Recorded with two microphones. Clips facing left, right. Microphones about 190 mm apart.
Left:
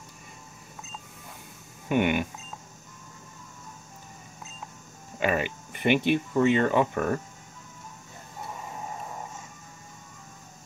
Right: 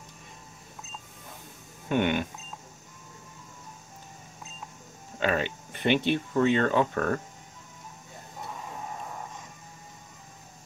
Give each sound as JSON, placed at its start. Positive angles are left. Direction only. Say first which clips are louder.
{"t": 1.9, "sound": "speech", "louder": "left 1 dB", "side_deg": 10}
{"t": 5.2, "sound": "speech", "louder": "left 1 dB", "side_deg": 10}